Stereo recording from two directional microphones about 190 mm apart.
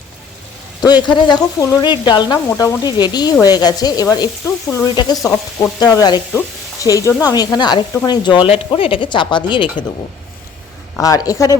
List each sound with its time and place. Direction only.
1.0 s frying: 20° left (ahead or behind)
6.8 s speech: 20° left (ahead or behind)
7.2 s frying: 20° left (ahead or behind)
11.0 s frying: 20° left (ahead or behind)